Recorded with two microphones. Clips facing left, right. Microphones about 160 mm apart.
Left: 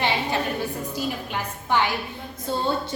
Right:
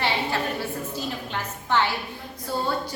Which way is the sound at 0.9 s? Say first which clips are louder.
Left 2 dB; 15° left (ahead or behind).